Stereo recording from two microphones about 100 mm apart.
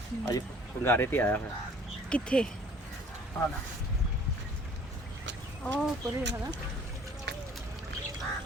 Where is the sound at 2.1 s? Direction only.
10° left (ahead or behind).